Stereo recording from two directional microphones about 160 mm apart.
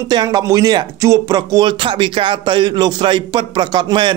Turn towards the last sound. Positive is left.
turn(degrees=-30)  # may be behind; listen again after turning